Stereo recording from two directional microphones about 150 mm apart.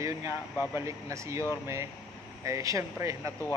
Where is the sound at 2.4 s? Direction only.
20° right (ahead or behind).